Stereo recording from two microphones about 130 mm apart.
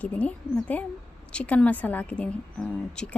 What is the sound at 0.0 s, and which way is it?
A woman's voice, 10° left (ahead or behind).